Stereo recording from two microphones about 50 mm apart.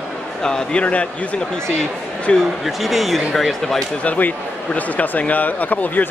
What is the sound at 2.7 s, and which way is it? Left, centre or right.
Speech, centre.